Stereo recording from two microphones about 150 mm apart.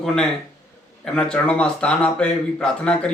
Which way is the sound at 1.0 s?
5° left (ahead or behind).